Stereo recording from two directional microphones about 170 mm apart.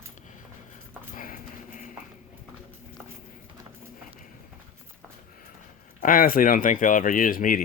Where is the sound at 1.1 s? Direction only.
55° left (ahead or behind).